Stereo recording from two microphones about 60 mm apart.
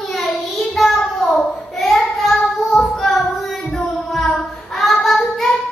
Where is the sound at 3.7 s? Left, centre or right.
Centre.